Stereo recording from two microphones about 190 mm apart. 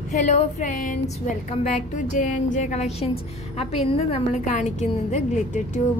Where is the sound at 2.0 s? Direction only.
40° left (ahead or behind).